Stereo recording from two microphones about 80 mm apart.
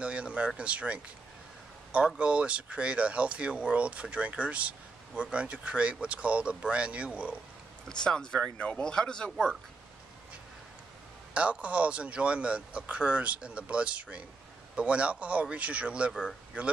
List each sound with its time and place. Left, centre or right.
0.0 s a sound: centre
0.6 s speech: centre
2.0 s speech: centre
8.0 s speech: centre
11.3 s speech: centre